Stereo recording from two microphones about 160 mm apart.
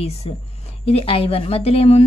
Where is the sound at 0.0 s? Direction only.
40° left (ahead or behind).